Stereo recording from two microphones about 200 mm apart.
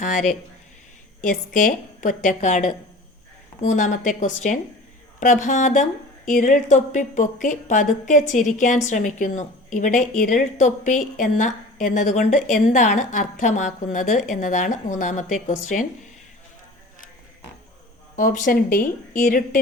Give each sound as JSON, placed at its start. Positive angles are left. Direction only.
{"t": 0.0, "sound": "a woman's voice", "side_deg": 40}
{"t": 1.5, "sound": "a woman's voice", "side_deg": 40}
{"t": 18.2, "sound": "a woman's voice", "side_deg": 40}